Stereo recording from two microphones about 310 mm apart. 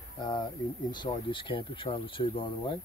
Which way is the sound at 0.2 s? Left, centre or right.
Centre.